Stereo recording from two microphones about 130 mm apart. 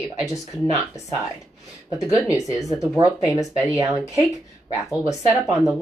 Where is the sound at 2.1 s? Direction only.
25° left (ahead or behind).